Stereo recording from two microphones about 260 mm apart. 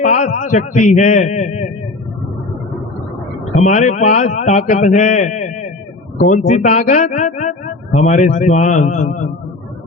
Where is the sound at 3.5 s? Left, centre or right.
Left.